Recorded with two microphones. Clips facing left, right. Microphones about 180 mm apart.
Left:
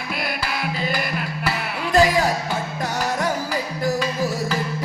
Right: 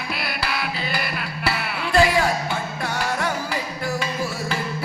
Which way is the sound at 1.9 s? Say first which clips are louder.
Left 1 dB; 40° left (ahead or behind).